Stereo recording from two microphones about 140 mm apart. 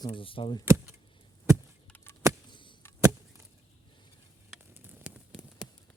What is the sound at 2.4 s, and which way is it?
Chop, 35° left (ahead or behind).